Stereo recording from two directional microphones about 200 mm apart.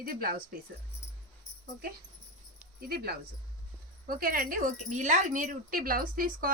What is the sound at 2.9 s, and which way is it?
Speech, 50° right (ahead or behind).